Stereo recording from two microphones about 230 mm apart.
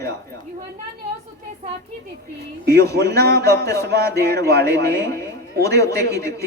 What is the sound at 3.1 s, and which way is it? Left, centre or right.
Speech, right.